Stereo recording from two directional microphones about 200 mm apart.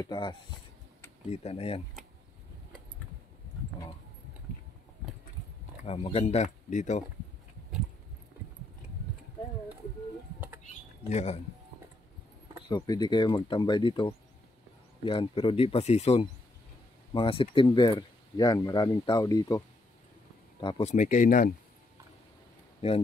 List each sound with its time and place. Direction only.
0.0 s speech: 20° left (ahead or behind)
5.9 s speech: 30° left (ahead or behind)
11.1 s speech: 35° left (ahead or behind)
12.6 s speech: 20° left (ahead or behind)
20.6 s speech: 25° left (ahead or behind)
20.9 s speech: 40° left (ahead or behind)